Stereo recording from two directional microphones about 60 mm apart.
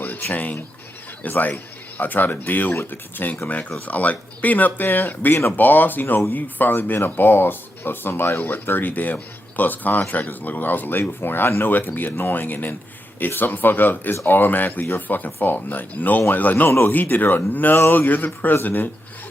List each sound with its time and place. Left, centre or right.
0.0 s speech: left